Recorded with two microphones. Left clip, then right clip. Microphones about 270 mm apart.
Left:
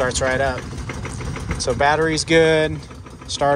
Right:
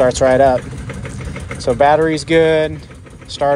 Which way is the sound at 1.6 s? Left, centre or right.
Centre.